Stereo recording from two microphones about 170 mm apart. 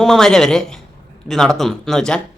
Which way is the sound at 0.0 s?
Centre (ahead or behind).